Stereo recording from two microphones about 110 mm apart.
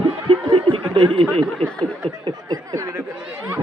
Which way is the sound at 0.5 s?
50° right (ahead or behind).